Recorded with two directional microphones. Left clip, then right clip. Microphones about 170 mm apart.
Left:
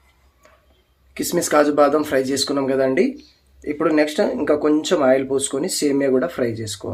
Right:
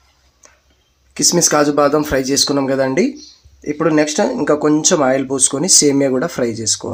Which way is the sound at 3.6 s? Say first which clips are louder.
Right 3 dB; 50° right (ahead or behind).